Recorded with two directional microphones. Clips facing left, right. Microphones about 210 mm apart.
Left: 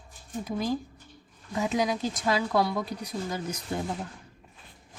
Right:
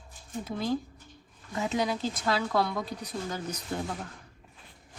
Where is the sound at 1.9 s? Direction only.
15° left (ahead or behind).